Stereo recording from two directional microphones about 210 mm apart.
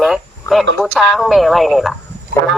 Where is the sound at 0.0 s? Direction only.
Centre (ahead or behind).